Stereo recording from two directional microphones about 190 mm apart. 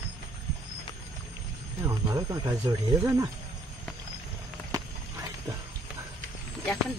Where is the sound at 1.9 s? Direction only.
20° right (ahead or behind).